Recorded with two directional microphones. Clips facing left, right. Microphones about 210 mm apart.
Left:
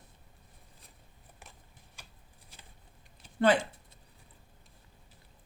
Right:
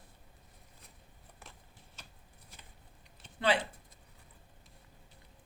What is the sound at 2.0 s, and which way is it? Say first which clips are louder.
Shuffling cards: even; 10° left (ahead or behind).